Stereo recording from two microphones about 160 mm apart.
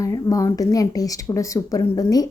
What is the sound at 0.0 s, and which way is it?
A woman's voice, 20° left (ahead or behind).